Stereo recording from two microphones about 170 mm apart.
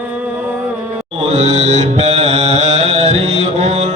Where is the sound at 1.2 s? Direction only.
40° right (ahead or behind).